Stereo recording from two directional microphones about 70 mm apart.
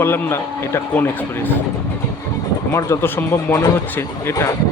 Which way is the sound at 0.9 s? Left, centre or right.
Left.